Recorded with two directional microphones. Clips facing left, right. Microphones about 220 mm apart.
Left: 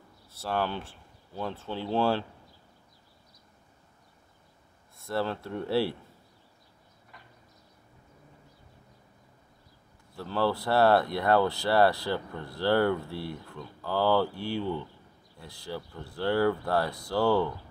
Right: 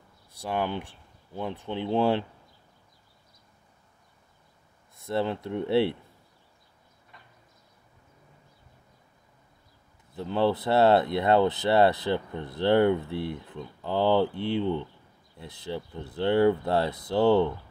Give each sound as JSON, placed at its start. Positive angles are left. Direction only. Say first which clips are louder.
{"t": 0.3, "sound": "speech", "louder": "right 1 dB", "side_deg": -15}
{"t": 4.9, "sound": "speech", "louder": "right 3 dB", "side_deg": -20}
{"t": 10.1, "sound": "speech", "louder": "right 3 dB", "side_deg": -20}